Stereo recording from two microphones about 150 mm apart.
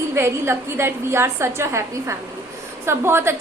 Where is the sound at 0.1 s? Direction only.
15° right (ahead or behind).